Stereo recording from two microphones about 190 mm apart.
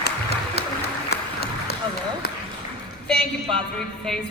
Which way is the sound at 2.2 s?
55° left (ahead or behind).